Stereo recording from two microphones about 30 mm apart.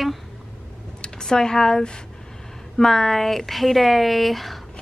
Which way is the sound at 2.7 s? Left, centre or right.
Centre.